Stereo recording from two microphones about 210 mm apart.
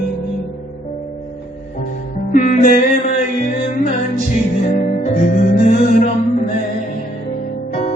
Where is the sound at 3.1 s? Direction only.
40° left (ahead or behind).